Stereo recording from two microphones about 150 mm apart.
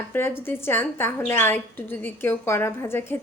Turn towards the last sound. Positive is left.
turn(degrees=15)  # may be behind; listen again after turning